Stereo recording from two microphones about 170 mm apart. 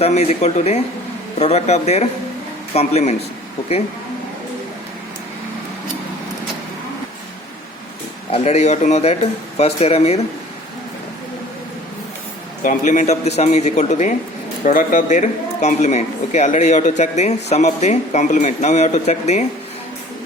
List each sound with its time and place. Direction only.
0.0 s speech: 40° left (ahead or behind)
8.3 s speech: 40° left (ahead or behind)
12.6 s speech: 45° left (ahead or behind)